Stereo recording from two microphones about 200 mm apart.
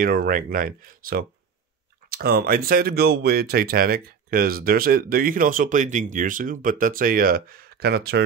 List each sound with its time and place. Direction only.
0.0 s speech: 45° right (ahead or behind)